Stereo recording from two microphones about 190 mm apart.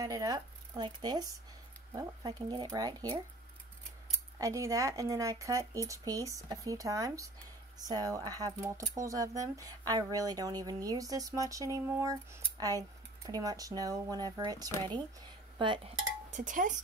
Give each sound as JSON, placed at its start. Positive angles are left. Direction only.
{"t": 0.0, "sound": "speech", "side_deg": -15}
{"t": 4.4, "sound": "speech", "side_deg": -15}
{"t": 15.5, "sound": "dishes", "side_deg": -25}
{"t": 16.3, "sound": "a sound", "side_deg": -40}